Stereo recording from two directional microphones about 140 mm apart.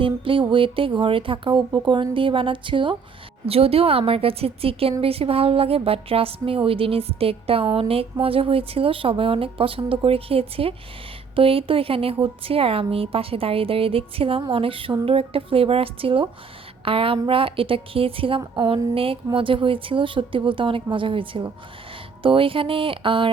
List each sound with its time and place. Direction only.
0.0 s a woman's voice: 40° right (ahead or behind)